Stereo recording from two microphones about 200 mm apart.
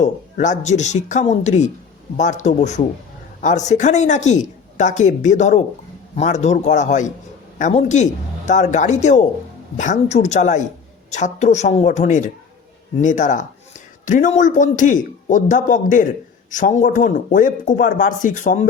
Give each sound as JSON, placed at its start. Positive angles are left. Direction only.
{"t": 0.0, "sound": "a man's voice", "side_deg": 40}